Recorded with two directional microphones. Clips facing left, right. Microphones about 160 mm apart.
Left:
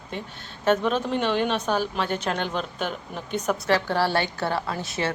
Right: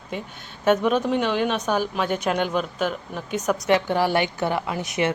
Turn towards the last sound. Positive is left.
turn(degrees=-20)  # may be behind; listen again after turning